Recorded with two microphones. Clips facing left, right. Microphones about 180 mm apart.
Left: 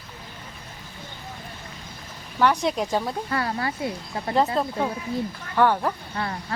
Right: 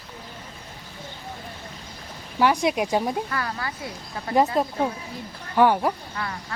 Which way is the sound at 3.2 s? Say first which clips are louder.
Left 3 dB; 25° left (ahead or behind).